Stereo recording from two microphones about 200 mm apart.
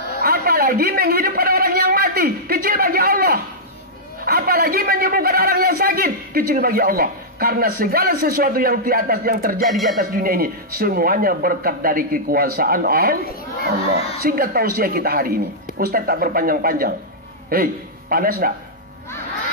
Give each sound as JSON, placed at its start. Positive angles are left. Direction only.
{"t": 0.2, "sound": "a sound", "side_deg": -50}
{"t": 4.2, "sound": "a man's voice", "side_deg": -50}
{"t": 9.7, "sound": "speech", "side_deg": 0}
{"t": 9.9, "sound": "speech", "side_deg": -45}
{"t": 18.1, "sound": "speech", "side_deg": -45}